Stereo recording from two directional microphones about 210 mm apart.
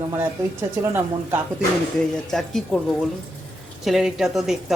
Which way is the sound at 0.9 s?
10° right (ahead or behind).